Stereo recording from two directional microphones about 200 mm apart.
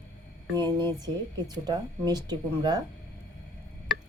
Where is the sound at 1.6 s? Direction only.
20° right (ahead or behind).